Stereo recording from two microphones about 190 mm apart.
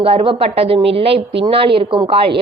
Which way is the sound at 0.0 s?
30° right (ahead or behind).